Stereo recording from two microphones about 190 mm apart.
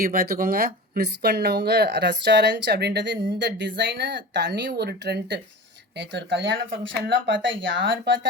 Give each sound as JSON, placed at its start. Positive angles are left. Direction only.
{"t": 0.0, "sound": "speech", "side_deg": -50}